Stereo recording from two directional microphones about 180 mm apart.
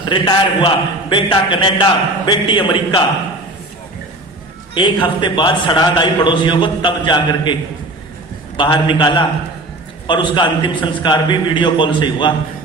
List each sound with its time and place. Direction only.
0.1 s a man's voice: 30° left (ahead or behind)
4.7 s a man's voice: 25° left (ahead or behind)
8.5 s a man's voice: 25° left (ahead or behind)